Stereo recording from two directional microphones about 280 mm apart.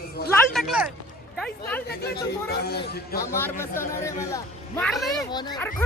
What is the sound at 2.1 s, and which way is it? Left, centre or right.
Speech, left.